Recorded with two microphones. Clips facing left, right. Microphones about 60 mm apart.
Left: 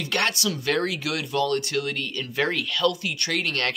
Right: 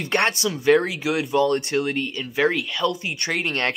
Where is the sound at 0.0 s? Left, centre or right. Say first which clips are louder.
Right 3 dB; right.